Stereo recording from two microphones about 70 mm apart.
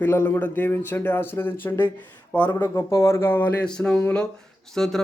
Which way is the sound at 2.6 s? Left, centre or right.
Left.